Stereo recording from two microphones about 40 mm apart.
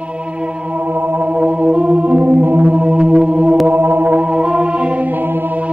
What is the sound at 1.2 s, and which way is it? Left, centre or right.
Organ, right.